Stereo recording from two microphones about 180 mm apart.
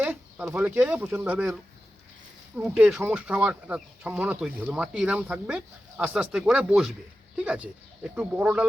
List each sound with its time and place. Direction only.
0.0 s speech: 10° right (ahead or behind)